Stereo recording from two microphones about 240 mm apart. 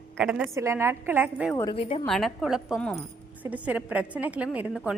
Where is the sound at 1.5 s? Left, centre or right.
Centre.